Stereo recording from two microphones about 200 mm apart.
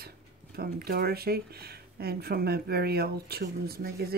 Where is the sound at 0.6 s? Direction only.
50° right (ahead or behind).